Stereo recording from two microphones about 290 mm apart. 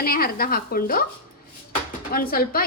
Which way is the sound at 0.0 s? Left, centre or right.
Left.